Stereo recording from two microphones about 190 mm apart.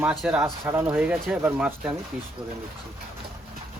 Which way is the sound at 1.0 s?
5° right (ahead or behind).